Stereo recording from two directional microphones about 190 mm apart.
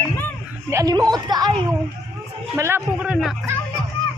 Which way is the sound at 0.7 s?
20° right (ahead or behind).